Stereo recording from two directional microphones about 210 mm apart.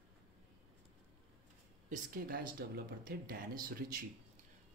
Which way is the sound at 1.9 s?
45° right (ahead or behind).